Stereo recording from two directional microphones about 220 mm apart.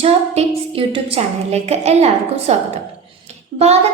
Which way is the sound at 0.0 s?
25° right (ahead or behind).